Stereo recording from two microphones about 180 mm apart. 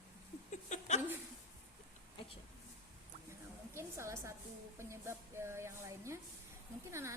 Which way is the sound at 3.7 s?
15° right (ahead or behind).